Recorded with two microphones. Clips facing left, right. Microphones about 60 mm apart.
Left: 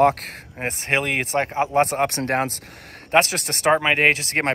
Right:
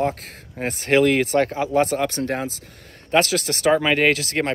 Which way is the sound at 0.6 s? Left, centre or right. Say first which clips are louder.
Right 6 dB; left.